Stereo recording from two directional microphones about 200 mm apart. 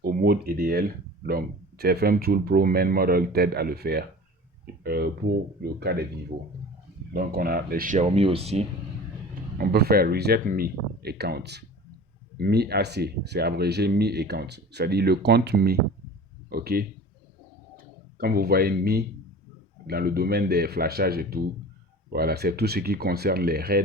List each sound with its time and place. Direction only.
0.0 s speech: 50° right (ahead or behind)
7.1 s speech: 50° right (ahead or behind); by 8.6 s 30° right (ahead or behind)
9.6 s speech: 50° right (ahead or behind)
18.2 s speech: 50° right (ahead or behind)